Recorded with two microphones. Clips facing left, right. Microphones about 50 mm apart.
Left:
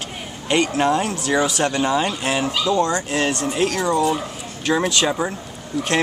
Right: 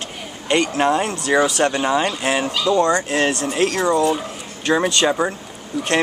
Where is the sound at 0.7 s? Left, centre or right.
Centre.